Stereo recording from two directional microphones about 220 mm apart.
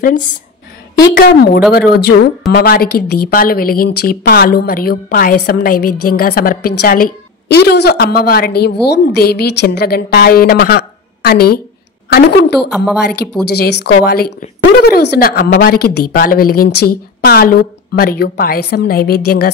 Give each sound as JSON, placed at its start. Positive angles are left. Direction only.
{"t": 1.1, "sound": "a woman's voice", "side_deg": 45}